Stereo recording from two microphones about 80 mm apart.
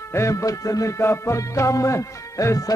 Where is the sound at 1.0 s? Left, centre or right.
Left.